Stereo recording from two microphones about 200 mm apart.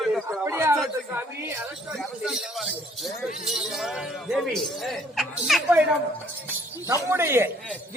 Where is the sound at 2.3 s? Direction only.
Centre (ahead or behind).